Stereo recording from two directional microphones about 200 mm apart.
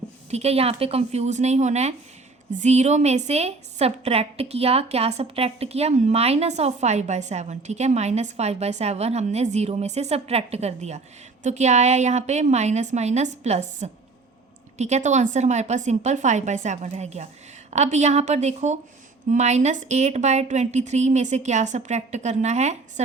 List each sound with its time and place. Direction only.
0.3 s a woman's voice: 30° right (ahead or behind)